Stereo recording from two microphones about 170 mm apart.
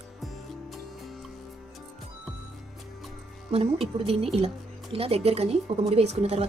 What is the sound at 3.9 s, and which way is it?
Speech, 35° right (ahead or behind).